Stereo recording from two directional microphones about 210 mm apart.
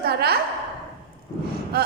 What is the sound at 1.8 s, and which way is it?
Speech, 50° right (ahead or behind).